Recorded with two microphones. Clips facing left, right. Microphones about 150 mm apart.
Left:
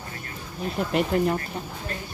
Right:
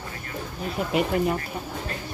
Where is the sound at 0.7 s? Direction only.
5° right (ahead or behind).